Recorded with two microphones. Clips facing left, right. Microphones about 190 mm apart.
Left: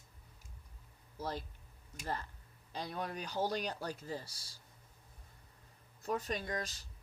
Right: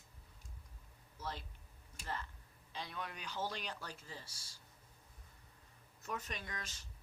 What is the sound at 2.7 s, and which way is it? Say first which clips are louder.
Speech: left 6 dB; 40° left (ahead or behind).